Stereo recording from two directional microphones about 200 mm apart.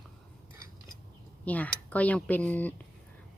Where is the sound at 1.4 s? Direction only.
5° left (ahead or behind).